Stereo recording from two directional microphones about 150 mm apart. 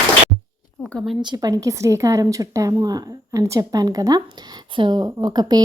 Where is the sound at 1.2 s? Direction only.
30° right (ahead or behind).